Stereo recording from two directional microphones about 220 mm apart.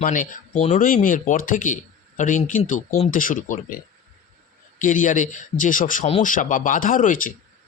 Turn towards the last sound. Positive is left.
turn(degrees=35)  # may be behind; listen again after turning